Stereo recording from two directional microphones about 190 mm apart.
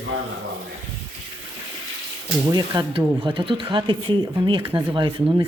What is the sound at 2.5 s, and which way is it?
Speech, 25° right (ahead or behind).